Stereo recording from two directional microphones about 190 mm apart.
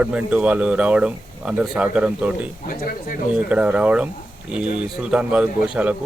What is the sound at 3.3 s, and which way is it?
Speech, 5° right (ahead or behind).